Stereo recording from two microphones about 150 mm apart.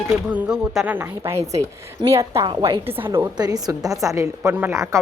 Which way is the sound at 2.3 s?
30° right (ahead or behind).